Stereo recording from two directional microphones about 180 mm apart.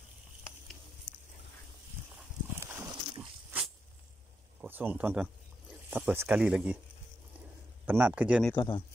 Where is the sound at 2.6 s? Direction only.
15° right (ahead or behind).